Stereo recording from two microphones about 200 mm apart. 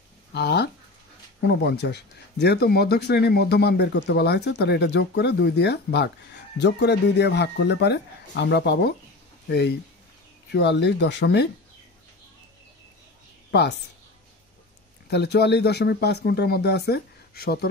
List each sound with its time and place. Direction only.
0.3 s speech: 60° left (ahead or behind)
13.5 s a woman's voice: 60° left (ahead or behind)
15.0 s speech: 55° left (ahead or behind)